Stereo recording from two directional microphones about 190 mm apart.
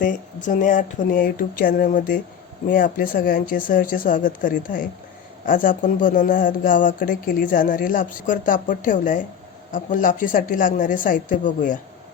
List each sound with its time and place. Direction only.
0.0 s speech: 45° left (ahead or behind)